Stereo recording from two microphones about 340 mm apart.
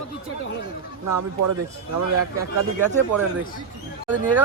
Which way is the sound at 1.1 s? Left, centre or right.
Right.